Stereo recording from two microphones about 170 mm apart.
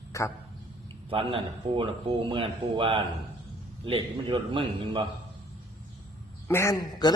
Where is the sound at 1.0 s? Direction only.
30° right (ahead or behind).